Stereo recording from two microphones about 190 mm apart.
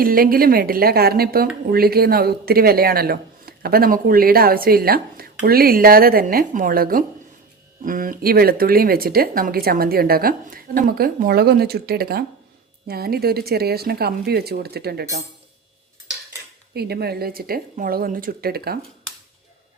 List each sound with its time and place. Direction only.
0.0 s a man's voice: 50° right (ahead or behind)
16.7 s a man's voice: 55° right (ahead or behind)